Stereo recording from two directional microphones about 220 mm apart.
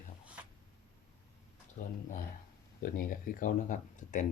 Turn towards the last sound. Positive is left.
turn(degrees=35)  # may be behind; listen again after turning